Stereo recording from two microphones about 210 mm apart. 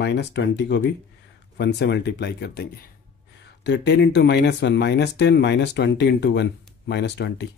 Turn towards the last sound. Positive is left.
turn(degrees=55)  # may be behind; listen again after turning